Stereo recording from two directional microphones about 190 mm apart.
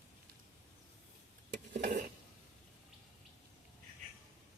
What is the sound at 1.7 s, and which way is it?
Stir, 40° right (ahead or behind).